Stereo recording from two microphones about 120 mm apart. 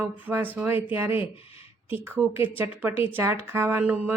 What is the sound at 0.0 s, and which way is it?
Speech, 15° right (ahead or behind).